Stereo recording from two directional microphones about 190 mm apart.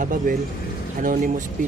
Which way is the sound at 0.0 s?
45° right (ahead or behind).